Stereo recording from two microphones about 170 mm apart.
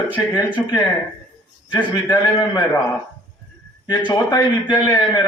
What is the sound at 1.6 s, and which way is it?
Speech, 25° left (ahead or behind).